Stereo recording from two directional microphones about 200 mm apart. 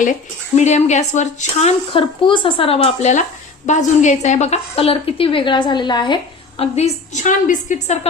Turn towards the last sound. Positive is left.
turn(degrees=40)  # may be behind; listen again after turning